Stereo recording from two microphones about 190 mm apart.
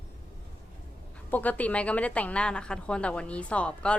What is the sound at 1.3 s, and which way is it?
A woman's voice, 10° left (ahead or behind).